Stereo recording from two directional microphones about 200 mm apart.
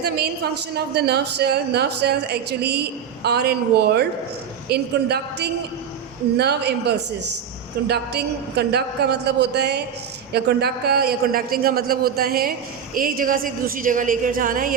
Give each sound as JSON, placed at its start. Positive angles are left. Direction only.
{"t": 0.9, "sound": "a man's voice", "side_deg": -55}